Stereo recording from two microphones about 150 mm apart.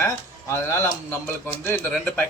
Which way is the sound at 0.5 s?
15° left (ahead or behind).